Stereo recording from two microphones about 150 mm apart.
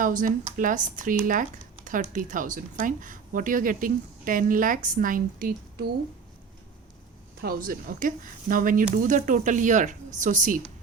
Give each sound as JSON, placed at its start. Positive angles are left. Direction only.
{"t": 0.0, "sound": "speech", "side_deg": -60}
{"t": 7.4, "sound": "speech", "side_deg": -70}